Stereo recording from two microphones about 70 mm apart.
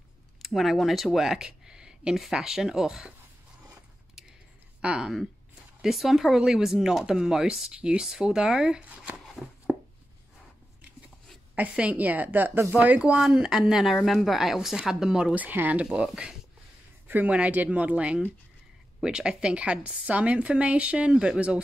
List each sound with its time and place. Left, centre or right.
0.4 s speech: centre
4.8 s speech: centre
11.5 s a woman's voice: centre
13.1 s speech: centre
15.3 s a woman's voice: right
15.8 s speech: centre
17.1 s a woman's voice: right